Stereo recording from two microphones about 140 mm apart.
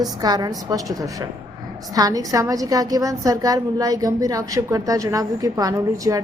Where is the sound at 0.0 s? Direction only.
30° right (ahead or behind).